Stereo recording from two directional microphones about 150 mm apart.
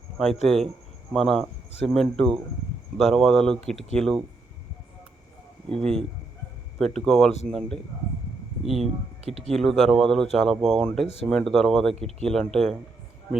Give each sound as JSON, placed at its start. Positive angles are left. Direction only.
{"t": 0.4, "sound": "speech", "side_deg": 0}
{"t": 5.8, "sound": "speech", "side_deg": 5}
{"t": 11.0, "sound": "speech", "side_deg": 45}
{"t": 11.3, "sound": "speech", "side_deg": 5}